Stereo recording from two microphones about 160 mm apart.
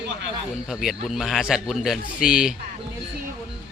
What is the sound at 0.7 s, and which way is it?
A man's voice, centre (ahead or behind).